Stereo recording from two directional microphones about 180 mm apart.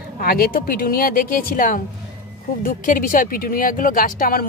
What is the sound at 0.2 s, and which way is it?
Speech, 55° left (ahead or behind).